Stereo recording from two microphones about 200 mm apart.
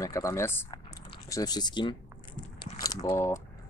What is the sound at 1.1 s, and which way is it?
Biting, 20° left (ahead or behind).